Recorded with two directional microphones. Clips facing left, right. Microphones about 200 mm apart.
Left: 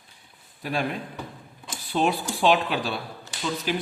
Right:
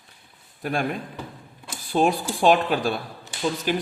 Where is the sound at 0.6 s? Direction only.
50° right (ahead or behind).